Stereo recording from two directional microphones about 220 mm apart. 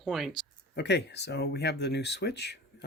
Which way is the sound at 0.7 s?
50° left (ahead or behind).